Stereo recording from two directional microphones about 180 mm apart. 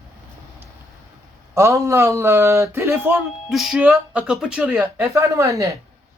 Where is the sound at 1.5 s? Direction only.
15° right (ahead or behind).